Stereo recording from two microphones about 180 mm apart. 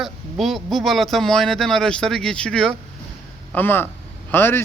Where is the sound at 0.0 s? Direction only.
Centre (ahead or behind).